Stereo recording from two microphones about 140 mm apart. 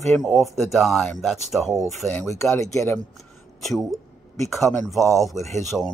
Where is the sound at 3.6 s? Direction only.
Centre (ahead or behind).